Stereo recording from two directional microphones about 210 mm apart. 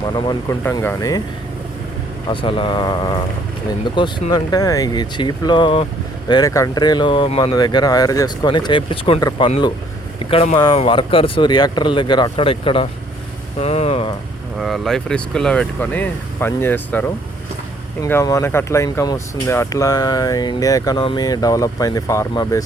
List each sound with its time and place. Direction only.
0.1 s speech: 20° left (ahead or behind)
2.2 s speech: 25° left (ahead or behind)
14.6 s speech: centre (ahead or behind)